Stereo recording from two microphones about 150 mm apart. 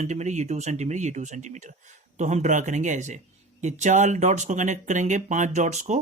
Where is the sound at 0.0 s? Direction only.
50° right (ahead or behind).